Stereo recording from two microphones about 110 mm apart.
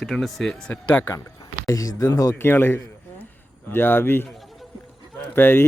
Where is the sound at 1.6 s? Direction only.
30° left (ahead or behind).